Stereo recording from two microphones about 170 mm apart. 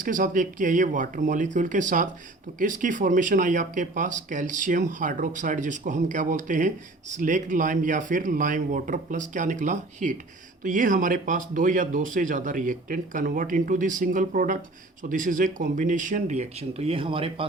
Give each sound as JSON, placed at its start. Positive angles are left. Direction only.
{"t": 0.0, "sound": "speech", "side_deg": -50}